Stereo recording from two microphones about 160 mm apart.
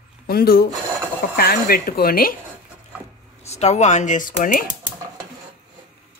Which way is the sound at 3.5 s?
45° left (ahead or behind).